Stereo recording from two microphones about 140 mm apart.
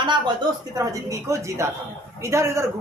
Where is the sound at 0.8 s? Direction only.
25° right (ahead or behind).